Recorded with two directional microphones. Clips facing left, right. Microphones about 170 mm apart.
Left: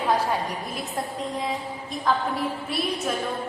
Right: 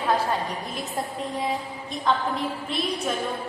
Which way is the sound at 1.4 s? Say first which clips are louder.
Right 1 dB; centre (ahead or behind).